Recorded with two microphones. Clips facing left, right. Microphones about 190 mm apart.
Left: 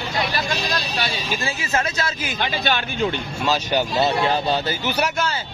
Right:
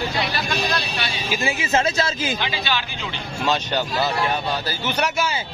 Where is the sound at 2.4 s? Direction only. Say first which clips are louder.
Left 3 dB; 50° left (ahead or behind).